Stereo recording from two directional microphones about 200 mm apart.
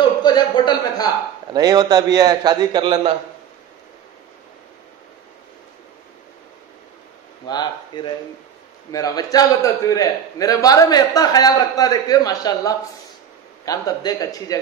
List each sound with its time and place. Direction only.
0.2 s a sound: 20° left (ahead or behind)
1.5 s a man's voice: 20° right (ahead or behind)
7.4 s a man's voice: 20° left (ahead or behind)